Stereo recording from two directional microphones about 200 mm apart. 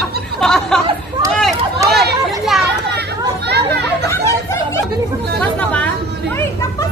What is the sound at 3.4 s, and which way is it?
Chatter, 55° right (ahead or behind).